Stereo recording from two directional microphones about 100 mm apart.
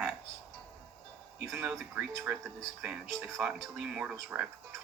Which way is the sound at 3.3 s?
10° right (ahead or behind).